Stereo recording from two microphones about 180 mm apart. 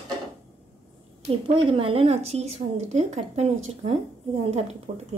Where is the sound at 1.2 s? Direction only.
30° right (ahead or behind).